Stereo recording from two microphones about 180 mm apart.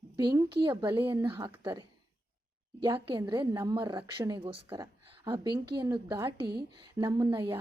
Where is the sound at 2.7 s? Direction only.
25° right (ahead or behind).